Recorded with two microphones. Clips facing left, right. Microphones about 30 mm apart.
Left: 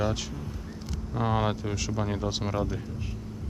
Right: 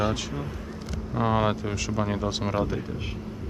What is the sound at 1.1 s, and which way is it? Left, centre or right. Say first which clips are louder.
Speech: right 3 dB; centre.